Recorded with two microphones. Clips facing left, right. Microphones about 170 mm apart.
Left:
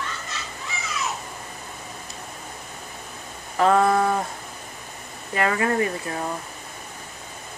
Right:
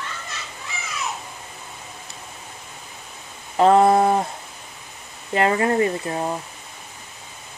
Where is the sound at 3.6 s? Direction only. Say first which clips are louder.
Right 4 dB; 25° right (ahead or behind).